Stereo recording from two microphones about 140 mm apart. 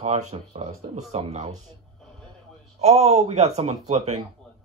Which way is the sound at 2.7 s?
50° right (ahead or behind).